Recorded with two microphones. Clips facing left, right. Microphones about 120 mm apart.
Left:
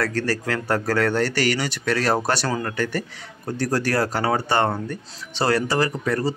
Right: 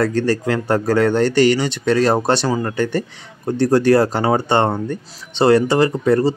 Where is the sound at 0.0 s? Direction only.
20° right (ahead or behind).